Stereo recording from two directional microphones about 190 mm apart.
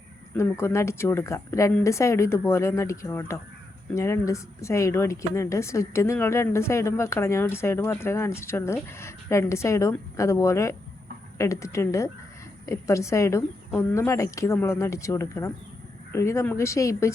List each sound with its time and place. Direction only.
0.3 s speech: 15° left (ahead or behind)